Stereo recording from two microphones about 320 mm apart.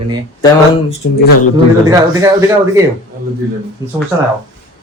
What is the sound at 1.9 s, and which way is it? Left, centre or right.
Speech, centre.